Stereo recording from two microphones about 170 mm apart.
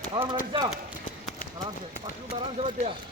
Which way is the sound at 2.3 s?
35° right (ahead or behind).